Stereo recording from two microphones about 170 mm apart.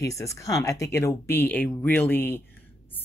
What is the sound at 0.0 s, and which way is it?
Speech, 20° left (ahead or behind).